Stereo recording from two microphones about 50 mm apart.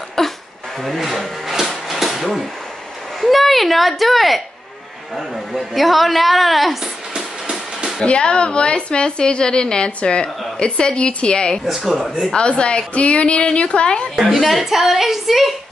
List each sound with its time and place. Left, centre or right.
0.2 s throat clearing: centre
0.8 s a sound: centre
3.2 s a woman's voice: centre
8.0 s a woman's voice: centre
11.6 s a woman's voice: centre
12.3 s a woman's voice: centre
14.1 s a woman's voice: centre